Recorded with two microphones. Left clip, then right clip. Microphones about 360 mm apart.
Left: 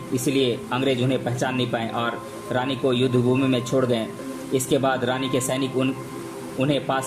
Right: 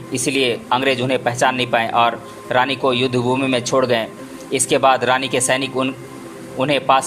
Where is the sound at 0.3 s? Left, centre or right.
Centre.